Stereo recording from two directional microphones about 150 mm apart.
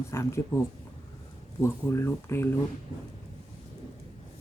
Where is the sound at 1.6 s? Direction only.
20° left (ahead or behind).